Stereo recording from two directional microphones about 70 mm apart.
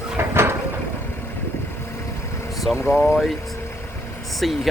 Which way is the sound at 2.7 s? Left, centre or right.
Centre.